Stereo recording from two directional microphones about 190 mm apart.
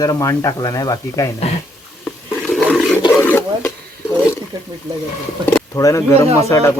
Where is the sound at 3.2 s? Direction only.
10° left (ahead or behind).